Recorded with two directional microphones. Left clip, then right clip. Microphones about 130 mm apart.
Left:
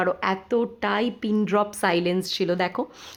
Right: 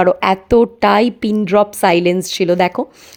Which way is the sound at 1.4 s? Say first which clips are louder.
Right 10 dB; 40° right (ahead or behind).